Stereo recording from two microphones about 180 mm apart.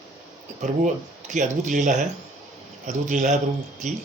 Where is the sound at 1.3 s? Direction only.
45° right (ahead or behind).